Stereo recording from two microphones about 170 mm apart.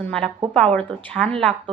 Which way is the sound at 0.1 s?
5° left (ahead or behind).